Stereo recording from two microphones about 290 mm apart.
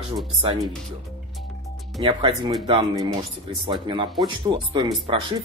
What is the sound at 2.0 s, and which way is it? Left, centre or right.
Speech, centre.